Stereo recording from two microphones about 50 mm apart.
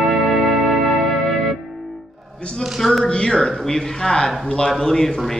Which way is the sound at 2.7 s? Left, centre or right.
Centre.